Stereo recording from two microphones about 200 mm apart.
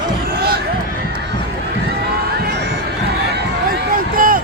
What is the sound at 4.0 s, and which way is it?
Run, 45° right (ahead or behind).